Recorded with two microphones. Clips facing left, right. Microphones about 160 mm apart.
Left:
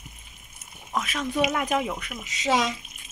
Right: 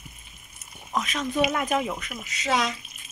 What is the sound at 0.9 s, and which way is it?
Speech, 5° left (ahead or behind).